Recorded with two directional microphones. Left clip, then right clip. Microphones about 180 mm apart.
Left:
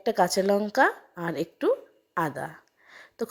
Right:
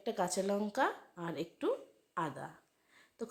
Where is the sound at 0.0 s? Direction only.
40° left (ahead or behind).